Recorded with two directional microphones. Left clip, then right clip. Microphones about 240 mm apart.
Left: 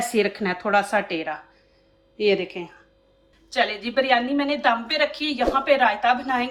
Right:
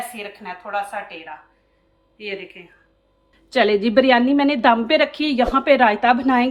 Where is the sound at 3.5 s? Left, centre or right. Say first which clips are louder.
Right 6 dB; right.